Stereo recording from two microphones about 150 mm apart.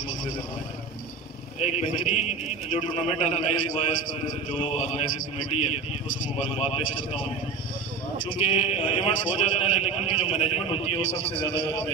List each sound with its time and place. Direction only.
1.6 s a man's voice: 50° left (ahead or behind)
6.5 s a man's voice: 45° left (ahead or behind)
8.4 s a man's voice: 45° left (ahead or behind)